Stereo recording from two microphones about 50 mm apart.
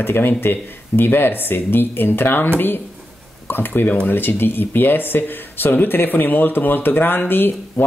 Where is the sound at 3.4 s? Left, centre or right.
Left.